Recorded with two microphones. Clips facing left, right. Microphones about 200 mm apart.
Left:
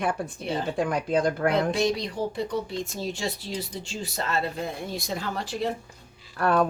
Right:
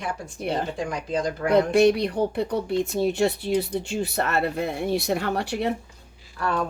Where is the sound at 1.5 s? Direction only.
60° right (ahead or behind).